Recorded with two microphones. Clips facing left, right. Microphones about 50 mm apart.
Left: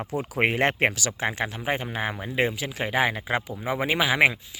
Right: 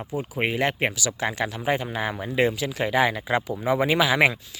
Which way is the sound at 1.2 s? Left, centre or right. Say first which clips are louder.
Right 2 dB; left.